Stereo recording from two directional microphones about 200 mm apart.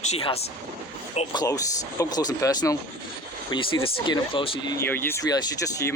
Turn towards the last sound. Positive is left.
turn(degrees=20)  # may be behind; listen again after turning